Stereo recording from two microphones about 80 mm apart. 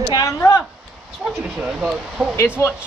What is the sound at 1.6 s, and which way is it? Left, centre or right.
Speech, centre.